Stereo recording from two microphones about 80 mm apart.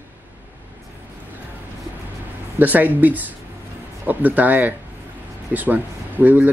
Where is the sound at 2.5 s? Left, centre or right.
Right.